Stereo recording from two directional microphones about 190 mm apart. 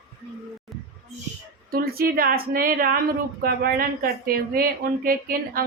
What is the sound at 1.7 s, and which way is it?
A woman's voice, 50° right (ahead or behind).